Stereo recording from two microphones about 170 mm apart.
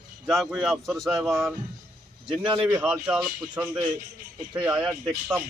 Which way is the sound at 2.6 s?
10° right (ahead or behind).